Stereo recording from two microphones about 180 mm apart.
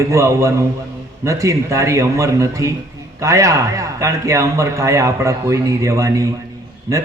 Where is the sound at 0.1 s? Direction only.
15° right (ahead or behind).